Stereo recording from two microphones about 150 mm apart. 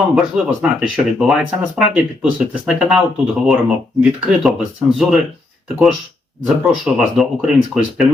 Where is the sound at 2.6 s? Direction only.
5° right (ahead or behind).